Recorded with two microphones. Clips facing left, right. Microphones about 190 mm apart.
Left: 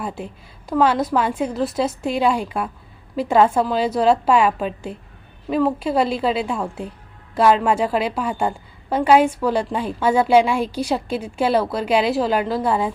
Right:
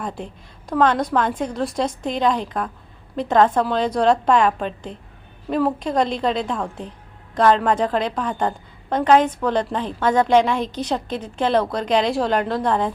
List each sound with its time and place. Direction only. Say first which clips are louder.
0.2 s a woman's voice: left 1 dB; 5° left (ahead or behind)